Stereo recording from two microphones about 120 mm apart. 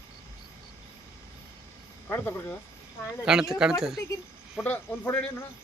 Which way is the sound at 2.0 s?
15° left (ahead or behind).